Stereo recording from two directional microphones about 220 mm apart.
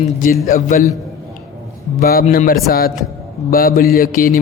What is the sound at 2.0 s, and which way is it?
A man's voice, 40° left (ahead or behind).